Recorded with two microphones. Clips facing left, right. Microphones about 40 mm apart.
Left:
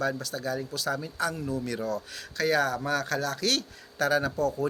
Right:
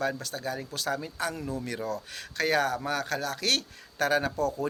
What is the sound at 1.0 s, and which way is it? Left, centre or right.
Speech, right.